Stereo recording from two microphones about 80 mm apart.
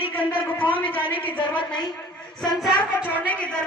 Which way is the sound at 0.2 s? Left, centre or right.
Left.